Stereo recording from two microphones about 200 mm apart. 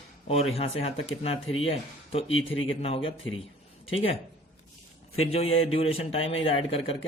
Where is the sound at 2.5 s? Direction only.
75° left (ahead or behind).